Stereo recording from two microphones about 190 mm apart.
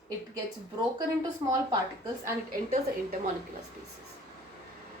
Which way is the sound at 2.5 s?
45° right (ahead or behind).